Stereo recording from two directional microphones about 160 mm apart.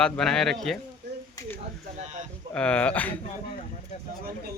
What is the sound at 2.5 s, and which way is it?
Speech, 5° left (ahead or behind).